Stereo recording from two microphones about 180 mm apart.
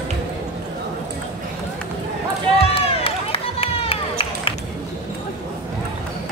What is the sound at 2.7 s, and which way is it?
Run, 30° left (ahead or behind).